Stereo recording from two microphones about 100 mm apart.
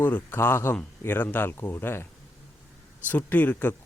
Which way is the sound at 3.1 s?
15° left (ahead or behind).